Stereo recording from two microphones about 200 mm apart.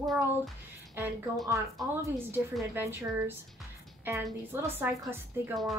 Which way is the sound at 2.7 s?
10° right (ahead or behind).